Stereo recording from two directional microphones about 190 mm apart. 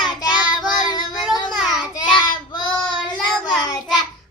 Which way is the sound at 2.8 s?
5° left (ahead or behind).